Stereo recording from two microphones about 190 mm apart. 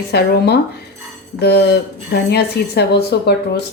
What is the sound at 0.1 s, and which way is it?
A woman's voice, 60° left (ahead or behind).